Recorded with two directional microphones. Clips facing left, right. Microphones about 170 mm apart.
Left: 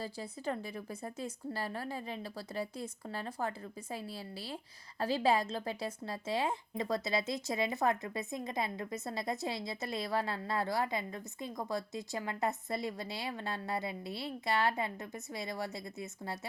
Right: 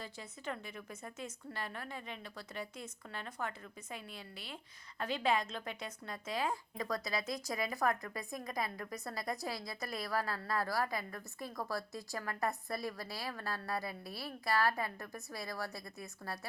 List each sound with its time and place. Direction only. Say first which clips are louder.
0.0 s speech: left 6 dB; 35° left (ahead or behind)